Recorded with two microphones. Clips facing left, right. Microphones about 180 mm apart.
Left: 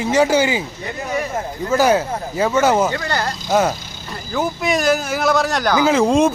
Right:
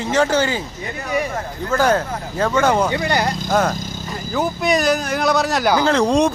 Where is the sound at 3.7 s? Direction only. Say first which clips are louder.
Right 8 dB; 45° right (ahead or behind).